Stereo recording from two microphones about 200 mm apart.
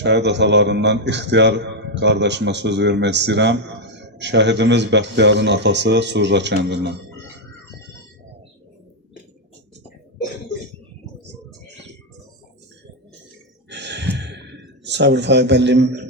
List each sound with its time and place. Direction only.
0.0 s a man's voice: 60° right (ahead or behind)
13.7 s gasp: 60° right (ahead or behind)